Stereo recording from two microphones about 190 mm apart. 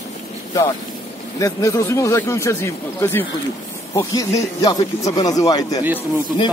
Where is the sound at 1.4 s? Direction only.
15° left (ahead or behind).